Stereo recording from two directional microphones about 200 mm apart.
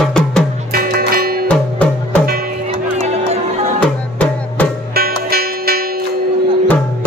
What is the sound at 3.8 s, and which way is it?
Music, 5° left (ahead or behind).